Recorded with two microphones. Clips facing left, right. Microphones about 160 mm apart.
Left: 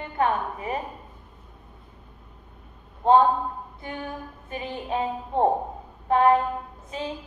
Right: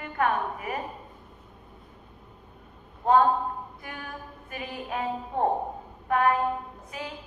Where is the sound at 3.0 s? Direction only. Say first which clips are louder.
Left 3 dB; 25° left (ahead or behind).